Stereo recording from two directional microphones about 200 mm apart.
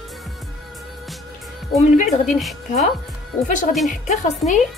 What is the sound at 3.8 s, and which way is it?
Speech, 35° left (ahead or behind).